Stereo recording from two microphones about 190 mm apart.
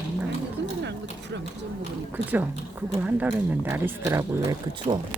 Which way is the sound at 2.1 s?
10° right (ahead or behind).